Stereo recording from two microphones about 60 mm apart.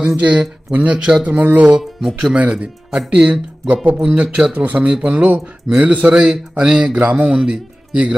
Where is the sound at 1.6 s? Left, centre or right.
Centre.